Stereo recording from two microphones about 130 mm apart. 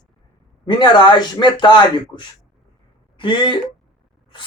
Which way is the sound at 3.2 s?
40° left (ahead or behind).